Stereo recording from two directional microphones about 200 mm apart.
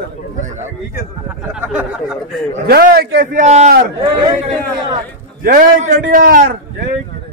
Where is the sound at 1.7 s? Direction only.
5° right (ahead or behind).